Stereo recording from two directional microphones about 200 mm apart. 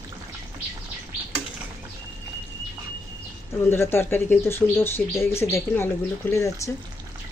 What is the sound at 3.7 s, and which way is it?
Speech, 10° left (ahead or behind).